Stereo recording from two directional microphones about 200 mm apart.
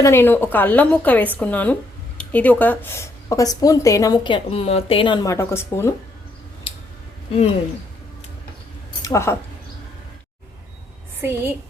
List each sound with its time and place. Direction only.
0.0 s a woman's voice: 10° left (ahead or behind)
9.0 s speech: 15° left (ahead or behind)
11.2 s a woman's voice: 10° right (ahead or behind)